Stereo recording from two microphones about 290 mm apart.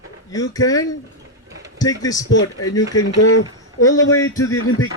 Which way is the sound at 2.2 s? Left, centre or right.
Left.